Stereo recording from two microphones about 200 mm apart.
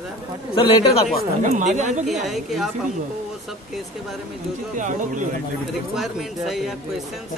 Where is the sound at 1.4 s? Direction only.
35° right (ahead or behind).